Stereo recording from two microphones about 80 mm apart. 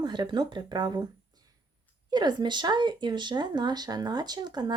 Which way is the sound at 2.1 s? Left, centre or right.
Right.